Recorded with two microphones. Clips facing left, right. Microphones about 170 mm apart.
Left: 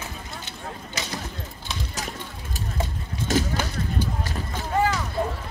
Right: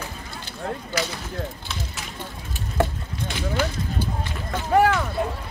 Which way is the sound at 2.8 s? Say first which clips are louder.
Right 9 dB; 65° right (ahead or behind).